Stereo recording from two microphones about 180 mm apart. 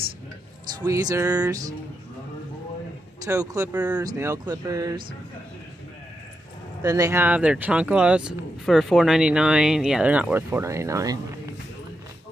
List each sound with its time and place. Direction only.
0.7 s music: 20° right (ahead or behind)
3.3 s music: 15° right (ahead or behind)
6.8 s speech: 20° right (ahead or behind)